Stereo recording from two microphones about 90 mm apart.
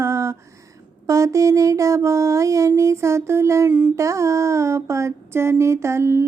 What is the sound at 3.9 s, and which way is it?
Music, 35° right (ahead or behind).